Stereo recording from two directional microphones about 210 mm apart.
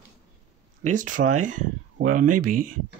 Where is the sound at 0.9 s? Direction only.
35° right (ahead or behind).